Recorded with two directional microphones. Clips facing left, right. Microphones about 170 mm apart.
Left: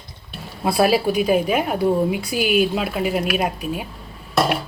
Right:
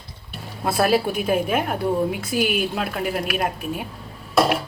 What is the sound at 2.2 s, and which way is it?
Speech, 45° right (ahead or behind).